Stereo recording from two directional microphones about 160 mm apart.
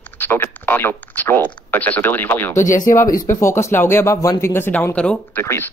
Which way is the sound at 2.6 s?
55° left (ahead or behind).